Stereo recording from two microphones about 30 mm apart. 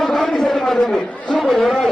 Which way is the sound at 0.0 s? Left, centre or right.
Centre.